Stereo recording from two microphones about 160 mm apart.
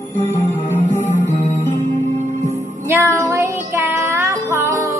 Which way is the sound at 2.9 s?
20° right (ahead or behind).